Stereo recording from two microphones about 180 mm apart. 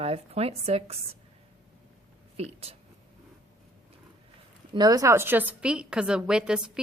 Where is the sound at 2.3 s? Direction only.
35° right (ahead or behind).